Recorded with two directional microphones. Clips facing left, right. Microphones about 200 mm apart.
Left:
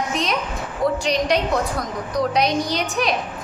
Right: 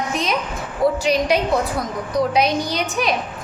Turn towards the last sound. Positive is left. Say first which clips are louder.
# right 1 dB
turn(degrees=0)  # may be behind; listen again after turning